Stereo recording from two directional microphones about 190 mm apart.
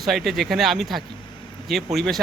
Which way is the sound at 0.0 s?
Centre (ahead or behind).